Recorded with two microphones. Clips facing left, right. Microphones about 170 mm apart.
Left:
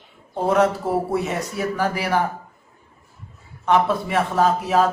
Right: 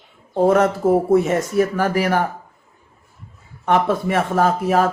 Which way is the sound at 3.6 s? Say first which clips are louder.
Right 1 dB; 50° right (ahead or behind).